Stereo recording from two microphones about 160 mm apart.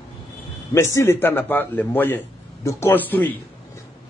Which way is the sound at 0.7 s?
15° left (ahead or behind).